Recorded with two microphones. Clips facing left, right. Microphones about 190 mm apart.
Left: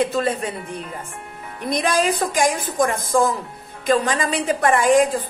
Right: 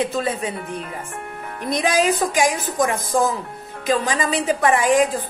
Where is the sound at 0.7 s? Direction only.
65° right (ahead or behind).